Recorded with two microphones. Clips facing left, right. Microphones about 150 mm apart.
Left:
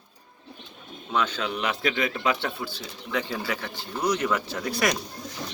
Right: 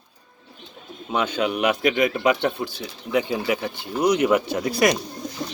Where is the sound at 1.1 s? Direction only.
15° right (ahead or behind).